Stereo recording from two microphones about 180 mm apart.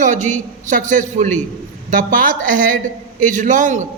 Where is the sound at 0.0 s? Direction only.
45° right (ahead or behind).